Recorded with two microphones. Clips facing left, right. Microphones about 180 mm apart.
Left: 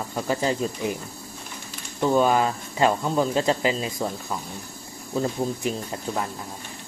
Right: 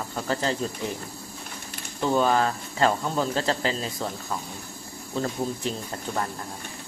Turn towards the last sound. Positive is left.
turn(degrees=10)  # may be behind; listen again after turning